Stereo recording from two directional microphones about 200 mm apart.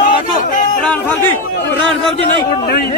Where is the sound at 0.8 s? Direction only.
10° left (ahead or behind).